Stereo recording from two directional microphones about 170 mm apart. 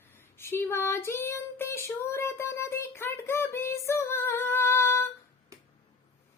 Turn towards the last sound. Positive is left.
turn(degrees=-20)  # may be behind; listen again after turning